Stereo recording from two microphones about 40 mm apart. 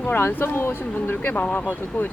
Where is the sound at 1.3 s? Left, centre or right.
Left.